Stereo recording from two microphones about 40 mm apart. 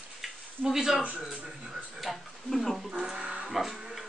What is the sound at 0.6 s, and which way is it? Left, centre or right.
Speech, centre.